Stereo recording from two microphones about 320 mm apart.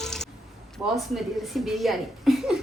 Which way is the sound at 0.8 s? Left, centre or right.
Centre.